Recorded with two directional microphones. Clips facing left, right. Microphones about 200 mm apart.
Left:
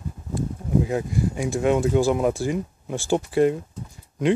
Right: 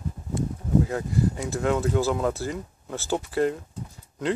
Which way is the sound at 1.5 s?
15° left (ahead or behind).